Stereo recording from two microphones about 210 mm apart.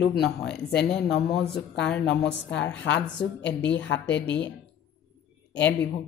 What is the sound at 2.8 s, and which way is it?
Speech, 55° left (ahead or behind).